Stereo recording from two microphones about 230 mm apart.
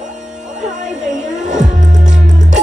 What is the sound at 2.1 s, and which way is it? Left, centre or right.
Music, centre.